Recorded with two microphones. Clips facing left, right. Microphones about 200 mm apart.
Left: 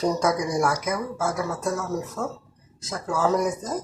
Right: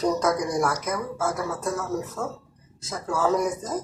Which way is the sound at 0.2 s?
Centre (ahead or behind).